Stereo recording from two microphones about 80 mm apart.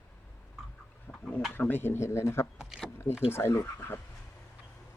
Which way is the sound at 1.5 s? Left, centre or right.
Left.